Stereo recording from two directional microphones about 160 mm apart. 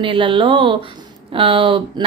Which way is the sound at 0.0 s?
30° right (ahead or behind).